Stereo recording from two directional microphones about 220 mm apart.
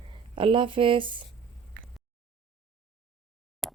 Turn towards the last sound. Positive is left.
turn(degrees=0)  # may be behind; listen again after turning